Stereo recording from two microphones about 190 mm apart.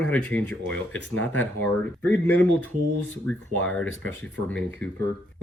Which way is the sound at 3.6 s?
10° left (ahead or behind).